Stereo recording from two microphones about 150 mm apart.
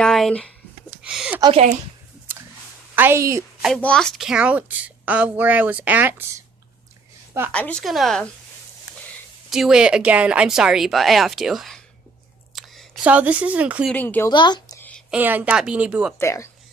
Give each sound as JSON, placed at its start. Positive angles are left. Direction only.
{"t": 0.0, "sound": "a sound", "side_deg": 5}
{"t": 1.0, "sound": "speech", "side_deg": -5}
{"t": 3.0, "sound": "a woman's voice", "side_deg": -20}
{"t": 3.6, "sound": "a woman's voice", "side_deg": 5}
{"t": 7.5, "sound": "speech", "side_deg": 10}
{"t": 9.5, "sound": "speech", "side_deg": -5}
{"t": 13.8, "sound": "speech", "side_deg": 10}
{"t": 14.3, "sound": "speech", "side_deg": 30}
{"t": 14.8, "sound": "a sound", "side_deg": 10}
{"t": 15.0, "sound": "a woman's voice", "side_deg": -10}
{"t": 16.2, "sound": "speech", "side_deg": 20}